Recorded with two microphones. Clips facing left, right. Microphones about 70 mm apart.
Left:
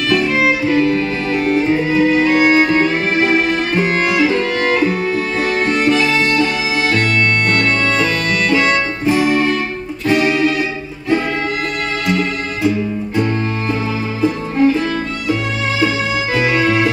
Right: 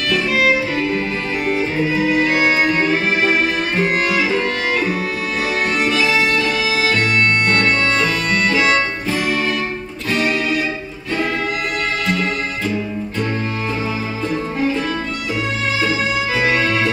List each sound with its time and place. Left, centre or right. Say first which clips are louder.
0.1 s music: left 1 dB; centre
14.2 s music: left 7 dB; centre
16.3 s music: left 4 dB; centre